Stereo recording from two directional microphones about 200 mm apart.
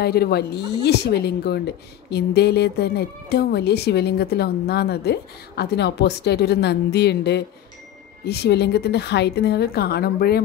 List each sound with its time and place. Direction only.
0.0 s speech: 50° left (ahead or behind)